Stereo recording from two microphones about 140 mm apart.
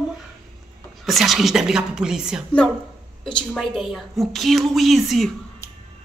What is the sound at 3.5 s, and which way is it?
A woman's voice, centre (ahead or behind).